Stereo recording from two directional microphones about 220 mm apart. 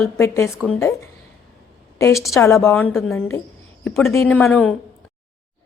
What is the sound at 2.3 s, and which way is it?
A woman's voice, 10° left (ahead or behind).